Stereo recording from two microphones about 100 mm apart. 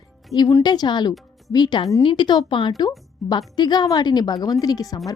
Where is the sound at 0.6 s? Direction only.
45° left (ahead or behind).